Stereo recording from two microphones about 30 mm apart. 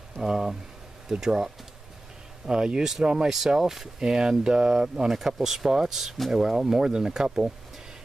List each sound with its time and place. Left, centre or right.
0.2 s speech: centre
2.4 s speech: right
3.3 s speech: centre
4.0 s speech: right